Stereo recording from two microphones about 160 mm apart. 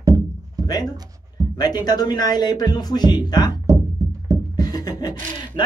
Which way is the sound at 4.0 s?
20° right (ahead or behind).